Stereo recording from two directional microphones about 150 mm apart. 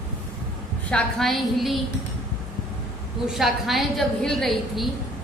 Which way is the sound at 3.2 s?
Centre (ahead or behind).